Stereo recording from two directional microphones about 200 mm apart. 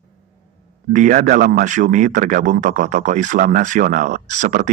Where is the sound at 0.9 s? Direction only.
40° right (ahead or behind).